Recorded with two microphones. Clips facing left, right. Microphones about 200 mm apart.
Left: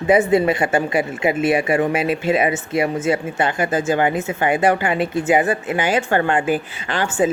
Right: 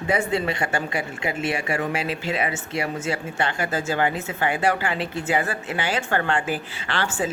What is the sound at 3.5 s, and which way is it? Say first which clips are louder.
Speech: left 6 dB; 20° left (ahead or behind).